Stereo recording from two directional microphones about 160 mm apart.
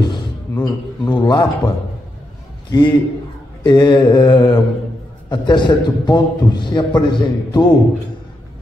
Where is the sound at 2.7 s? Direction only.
30° left (ahead or behind).